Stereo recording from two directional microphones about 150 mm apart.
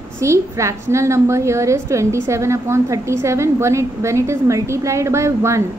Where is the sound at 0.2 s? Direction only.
20° right (ahead or behind).